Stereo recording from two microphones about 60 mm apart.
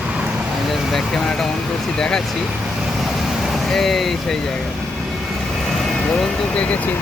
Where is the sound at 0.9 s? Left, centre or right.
Centre.